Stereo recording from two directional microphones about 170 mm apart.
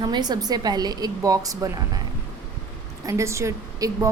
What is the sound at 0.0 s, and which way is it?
A woman's voice, 25° right (ahead or behind).